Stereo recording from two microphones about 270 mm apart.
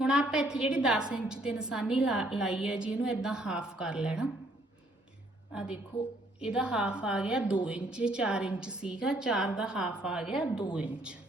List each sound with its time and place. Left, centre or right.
0.0 s a woman's voice: centre
6.4 s a woman's voice: centre